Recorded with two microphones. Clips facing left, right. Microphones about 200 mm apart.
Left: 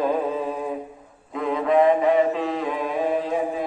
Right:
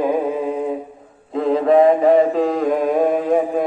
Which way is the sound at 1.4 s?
35° right (ahead or behind).